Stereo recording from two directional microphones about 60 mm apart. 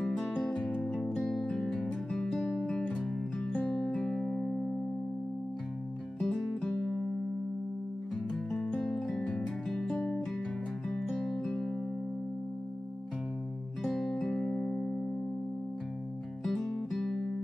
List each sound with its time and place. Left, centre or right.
0.7 s music: centre
2.6 s music: centre
3.9 s music: centre
6.1 s music: centre
8.5 s music: centre
13.8 s music: centre
16.4 s music: centre